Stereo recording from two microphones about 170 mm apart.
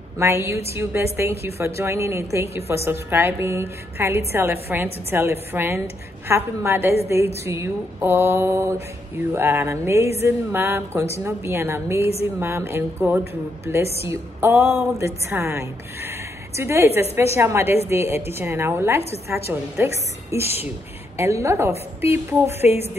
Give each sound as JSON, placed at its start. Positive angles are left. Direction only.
{"t": 0.2, "sound": "a woman's voice", "side_deg": -15}